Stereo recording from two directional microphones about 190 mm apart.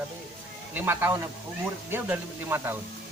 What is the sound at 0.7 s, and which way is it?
Speech, 10° right (ahead or behind).